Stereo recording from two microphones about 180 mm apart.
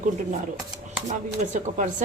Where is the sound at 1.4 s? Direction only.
45° right (ahead or behind).